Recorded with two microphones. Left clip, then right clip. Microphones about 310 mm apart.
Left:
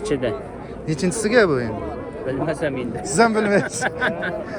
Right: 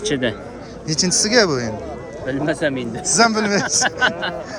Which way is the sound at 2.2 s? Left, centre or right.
Right.